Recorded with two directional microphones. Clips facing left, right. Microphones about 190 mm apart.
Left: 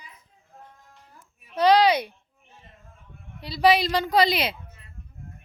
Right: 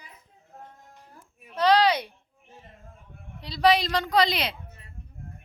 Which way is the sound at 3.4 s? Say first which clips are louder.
Left 2 dB; 5° left (ahead or behind).